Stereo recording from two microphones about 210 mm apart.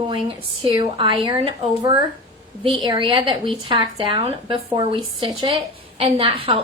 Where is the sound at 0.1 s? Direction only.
25° right (ahead or behind).